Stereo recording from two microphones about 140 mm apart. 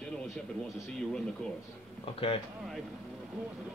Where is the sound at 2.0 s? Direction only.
40° left (ahead or behind).